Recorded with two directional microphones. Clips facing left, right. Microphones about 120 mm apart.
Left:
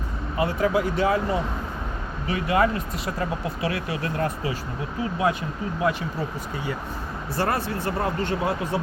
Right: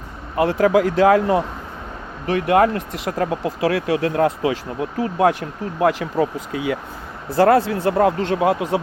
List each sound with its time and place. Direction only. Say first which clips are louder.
0.3 s speech: right 7 dB; 75° right (ahead or behind)